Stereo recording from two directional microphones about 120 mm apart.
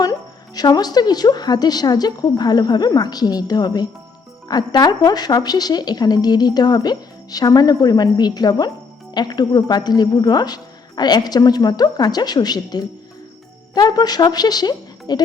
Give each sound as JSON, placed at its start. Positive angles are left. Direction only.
{"t": 0.0, "sound": "speech", "side_deg": 30}